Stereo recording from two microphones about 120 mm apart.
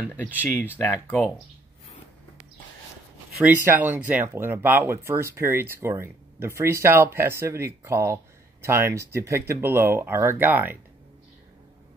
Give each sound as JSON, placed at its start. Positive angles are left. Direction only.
{"t": 0.4, "sound": "speech", "side_deg": 15}
{"t": 3.4, "sound": "speech", "side_deg": -15}